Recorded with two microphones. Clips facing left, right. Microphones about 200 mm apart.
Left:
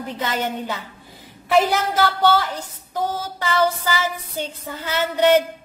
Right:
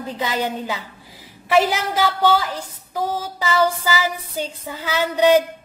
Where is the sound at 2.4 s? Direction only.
10° right (ahead or behind).